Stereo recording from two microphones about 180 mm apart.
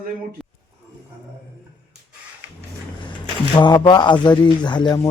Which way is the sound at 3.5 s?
25° left (ahead or behind).